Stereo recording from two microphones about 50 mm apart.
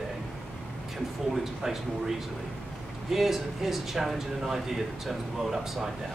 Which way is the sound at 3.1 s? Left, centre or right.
Centre.